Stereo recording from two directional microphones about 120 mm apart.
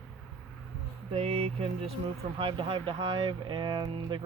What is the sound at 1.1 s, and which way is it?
Speech, 55° right (ahead or behind).